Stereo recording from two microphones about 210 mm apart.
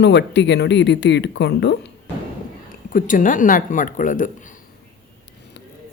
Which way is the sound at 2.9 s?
40° left (ahead or behind).